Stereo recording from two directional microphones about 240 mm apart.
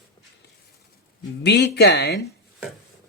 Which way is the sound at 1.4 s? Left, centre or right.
Left.